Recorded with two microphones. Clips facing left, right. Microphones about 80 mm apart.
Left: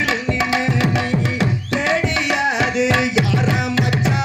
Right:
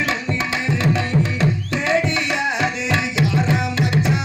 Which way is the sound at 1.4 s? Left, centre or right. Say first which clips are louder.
Left 1 dB; centre.